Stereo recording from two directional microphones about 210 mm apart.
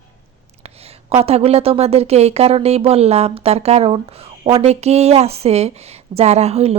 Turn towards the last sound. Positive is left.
turn(degrees=-30)  # may be behind; listen again after turning